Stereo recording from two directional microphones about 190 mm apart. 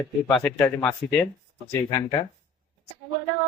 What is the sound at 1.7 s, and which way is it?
Speech, 20° left (ahead or behind).